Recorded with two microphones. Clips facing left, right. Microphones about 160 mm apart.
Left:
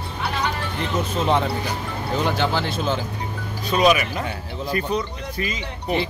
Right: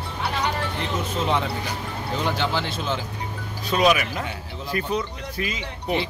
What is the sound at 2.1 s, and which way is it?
Speech, 45° left (ahead or behind).